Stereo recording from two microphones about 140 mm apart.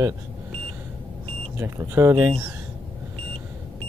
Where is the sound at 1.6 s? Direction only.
20° right (ahead or behind).